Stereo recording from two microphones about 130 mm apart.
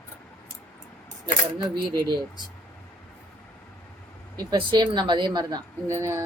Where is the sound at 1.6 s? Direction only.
30° right (ahead or behind).